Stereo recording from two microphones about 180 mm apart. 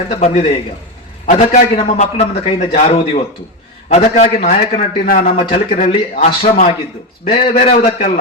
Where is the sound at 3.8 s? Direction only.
35° left (ahead or behind).